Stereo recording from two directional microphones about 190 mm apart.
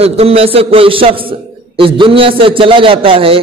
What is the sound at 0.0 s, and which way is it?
A man's voice, 30° right (ahead or behind).